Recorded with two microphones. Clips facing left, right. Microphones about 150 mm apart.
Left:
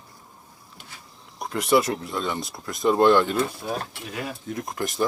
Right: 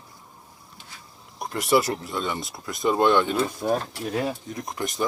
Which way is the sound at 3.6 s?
45° right (ahead or behind).